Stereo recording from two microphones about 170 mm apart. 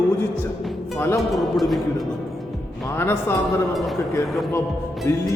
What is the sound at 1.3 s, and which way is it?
Music, centre (ahead or behind).